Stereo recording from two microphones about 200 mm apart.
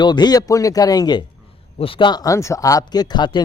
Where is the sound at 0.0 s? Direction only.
20° left (ahead or behind).